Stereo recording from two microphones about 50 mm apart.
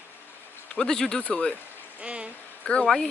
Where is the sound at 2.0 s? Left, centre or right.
Right.